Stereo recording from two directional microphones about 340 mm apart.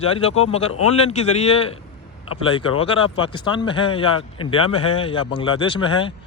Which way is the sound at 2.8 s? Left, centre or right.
Centre.